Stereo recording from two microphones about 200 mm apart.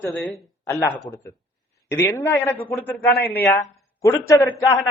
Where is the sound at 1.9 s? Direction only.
15° left (ahead or behind).